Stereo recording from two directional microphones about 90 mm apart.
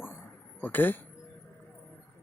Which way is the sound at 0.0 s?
25° left (ahead or behind).